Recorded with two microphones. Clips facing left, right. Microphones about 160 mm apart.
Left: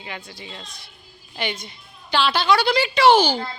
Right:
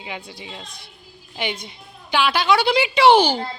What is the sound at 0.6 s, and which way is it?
Speech, 55° right (ahead or behind).